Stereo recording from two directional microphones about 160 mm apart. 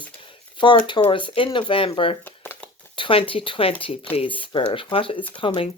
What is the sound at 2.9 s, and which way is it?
Speech, 30° left (ahead or behind).